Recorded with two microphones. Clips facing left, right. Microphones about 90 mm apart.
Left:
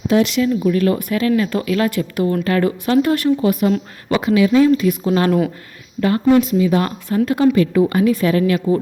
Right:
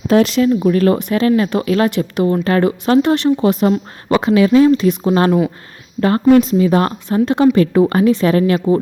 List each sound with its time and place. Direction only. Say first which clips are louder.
0.1 s speech: right 4 dB; 40° right (ahead or behind)
0.9 s speech: right 3 dB; 25° right (ahead or behind)
1.9 s speech: right 3 dB; 25° right (ahead or behind); by 4.7 s 40° right (ahead or behind)
4.7 s speech: right 2 dB; 25° right (ahead or behind); by 6.9 s 40° right (ahead or behind)
7.1 s speech: right 2 dB; 25° right (ahead or behind)
7.5 s speech: right 3 dB; 40° right (ahead or behind)